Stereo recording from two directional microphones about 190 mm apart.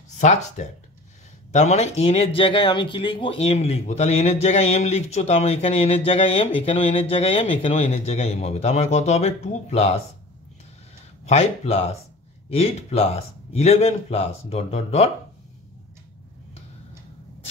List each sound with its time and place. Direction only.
0.1 s speech: 35° left (ahead or behind)
11.2 s speech: 35° left (ahead or behind)